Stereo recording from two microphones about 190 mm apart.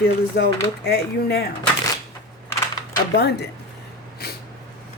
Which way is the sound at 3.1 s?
60° left (ahead or behind).